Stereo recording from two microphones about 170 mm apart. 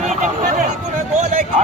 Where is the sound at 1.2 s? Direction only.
45° right (ahead or behind).